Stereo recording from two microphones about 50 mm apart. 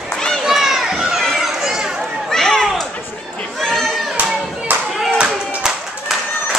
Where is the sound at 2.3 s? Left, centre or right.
Centre.